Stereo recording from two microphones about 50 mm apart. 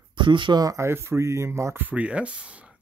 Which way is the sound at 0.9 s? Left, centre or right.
Right.